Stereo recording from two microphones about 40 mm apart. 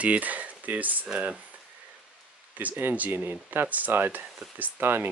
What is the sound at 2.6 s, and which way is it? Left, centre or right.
Speech, right.